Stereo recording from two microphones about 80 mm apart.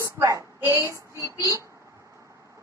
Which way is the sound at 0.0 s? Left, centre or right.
Right.